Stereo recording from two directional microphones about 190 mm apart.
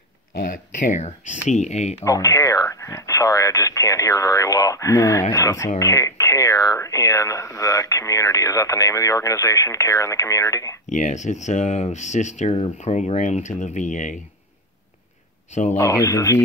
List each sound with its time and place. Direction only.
0.4 s speech: 45° left (ahead or behind)
2.0 s speech: 15° left (ahead or behind)
10.9 s speech: 40° left (ahead or behind)
15.5 s speech: 40° left (ahead or behind)
15.8 s speech: 15° left (ahead or behind)